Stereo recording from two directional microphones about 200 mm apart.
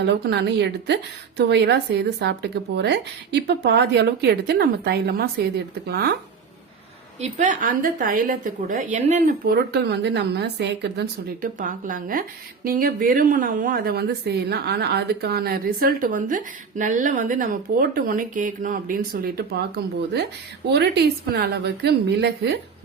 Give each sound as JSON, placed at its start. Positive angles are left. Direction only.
{"t": 0.0, "sound": "speech", "side_deg": -55}
{"t": 7.2, "sound": "a woman's voice", "side_deg": -35}
{"t": 9.7, "sound": "speech", "side_deg": -60}
{"t": 11.6, "sound": "a woman's voice", "side_deg": -40}